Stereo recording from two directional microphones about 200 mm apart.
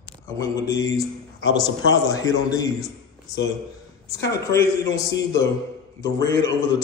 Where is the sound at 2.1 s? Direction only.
20° left (ahead or behind).